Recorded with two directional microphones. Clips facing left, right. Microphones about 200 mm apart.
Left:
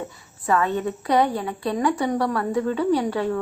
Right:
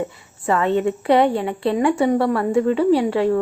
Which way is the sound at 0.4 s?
25° right (ahead or behind).